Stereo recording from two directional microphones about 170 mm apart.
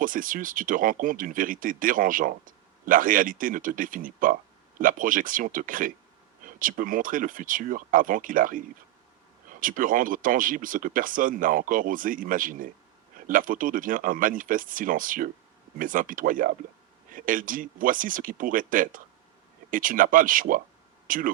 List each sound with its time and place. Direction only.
0.0 s speech: 55° right (ahead or behind)